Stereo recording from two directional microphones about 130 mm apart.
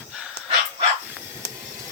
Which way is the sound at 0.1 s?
5° right (ahead or behind).